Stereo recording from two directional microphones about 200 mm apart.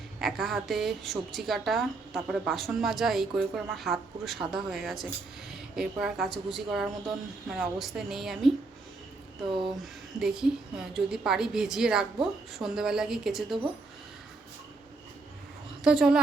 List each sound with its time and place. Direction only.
0.2 s a woman's voice: centre (ahead or behind)
9.5 s speech: 25° right (ahead or behind)
10.2 s a woman's voice: 5° right (ahead or behind)
15.8 s a woman's voice: 5° right (ahead or behind)